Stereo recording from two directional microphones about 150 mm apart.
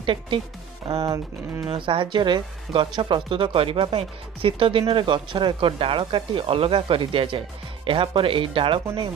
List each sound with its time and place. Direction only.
0.0 s speech: 35° right (ahead or behind)